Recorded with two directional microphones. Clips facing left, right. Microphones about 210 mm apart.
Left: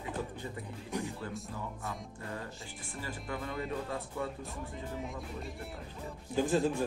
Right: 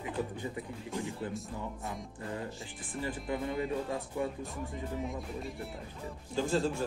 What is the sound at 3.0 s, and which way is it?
Speech, 20° right (ahead or behind).